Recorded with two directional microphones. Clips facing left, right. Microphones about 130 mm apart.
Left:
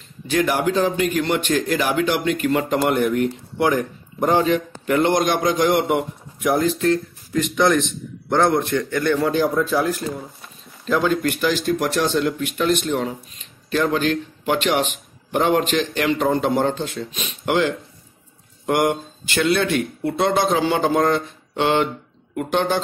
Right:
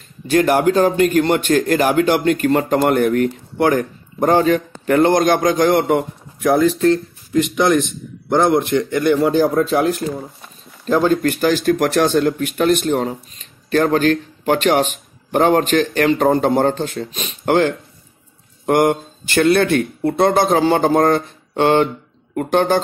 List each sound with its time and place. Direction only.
0.3 s speech: 50° right (ahead or behind)
7.3 s a man's voice: 20° right (ahead or behind)
10.9 s a man's voice: 40° right (ahead or behind)